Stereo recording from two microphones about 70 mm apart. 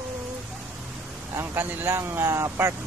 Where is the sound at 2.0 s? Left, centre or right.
Right.